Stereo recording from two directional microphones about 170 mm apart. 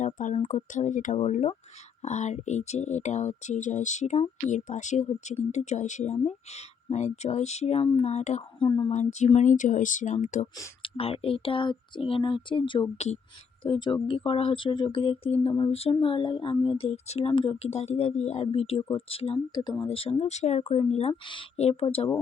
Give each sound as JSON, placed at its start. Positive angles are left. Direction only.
{"t": 0.0, "sound": "speech", "side_deg": 45}
{"t": 8.5, "sound": "speech", "side_deg": 30}
{"t": 8.9, "sound": "speech", "side_deg": 45}
{"t": 10.8, "sound": "speech", "side_deg": 35}